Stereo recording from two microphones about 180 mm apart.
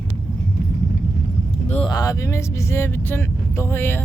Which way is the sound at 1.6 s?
35° left (ahead or behind).